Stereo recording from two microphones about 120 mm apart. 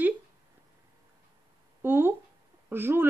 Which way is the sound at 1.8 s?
20° right (ahead or behind).